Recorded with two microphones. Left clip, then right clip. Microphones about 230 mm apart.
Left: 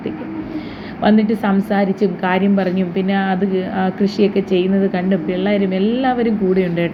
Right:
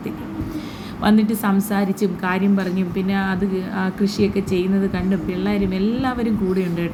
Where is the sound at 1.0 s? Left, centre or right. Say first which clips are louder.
Left 4 dB; centre.